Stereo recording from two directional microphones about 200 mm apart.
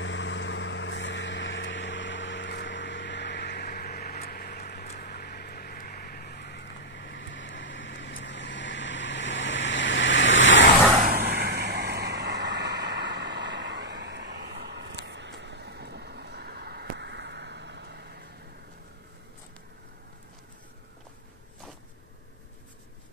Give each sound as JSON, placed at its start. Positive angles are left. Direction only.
{"t": 0.0, "sound": "vehicle", "side_deg": 65}
{"t": 11.0, "sound": "vehicle", "side_deg": -45}